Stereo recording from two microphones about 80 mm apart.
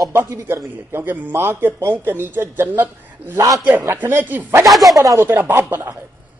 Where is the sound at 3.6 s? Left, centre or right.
Right.